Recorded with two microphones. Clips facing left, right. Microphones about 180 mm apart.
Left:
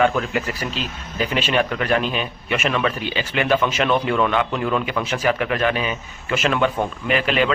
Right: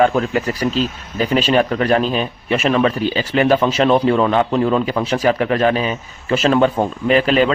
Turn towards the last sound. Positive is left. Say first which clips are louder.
# right 6 dB
turn(degrees=-35)  # may be behind; listen again after turning